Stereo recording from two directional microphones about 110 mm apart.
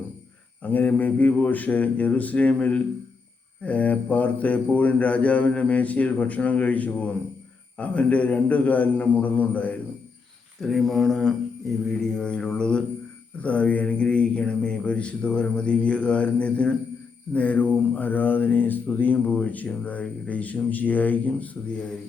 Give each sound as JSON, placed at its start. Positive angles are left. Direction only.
{"t": 0.6, "sound": "speech", "side_deg": 15}
{"t": 10.6, "sound": "mantra", "side_deg": 0}
{"t": 11.9, "sound": "speech", "side_deg": 5}